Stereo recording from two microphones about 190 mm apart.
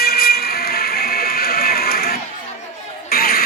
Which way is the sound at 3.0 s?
50° left (ahead or behind).